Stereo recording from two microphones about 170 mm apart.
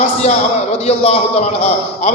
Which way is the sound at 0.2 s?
40° left (ahead or behind).